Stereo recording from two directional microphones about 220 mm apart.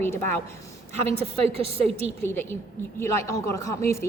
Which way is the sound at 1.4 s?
25° right (ahead or behind).